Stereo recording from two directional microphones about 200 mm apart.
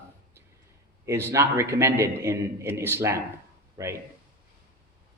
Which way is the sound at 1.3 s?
15° right (ahead or behind).